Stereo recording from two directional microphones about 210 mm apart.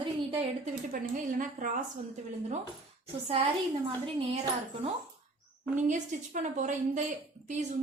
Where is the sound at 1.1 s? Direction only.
40° right (ahead or behind).